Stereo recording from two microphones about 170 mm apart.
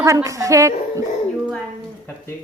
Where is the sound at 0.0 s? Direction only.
20° right (ahead or behind).